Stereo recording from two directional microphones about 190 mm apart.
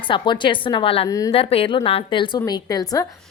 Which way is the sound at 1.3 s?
30° left (ahead or behind).